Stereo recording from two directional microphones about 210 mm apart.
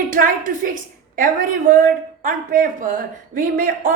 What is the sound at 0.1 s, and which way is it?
A woman's voice, 40° right (ahead or behind).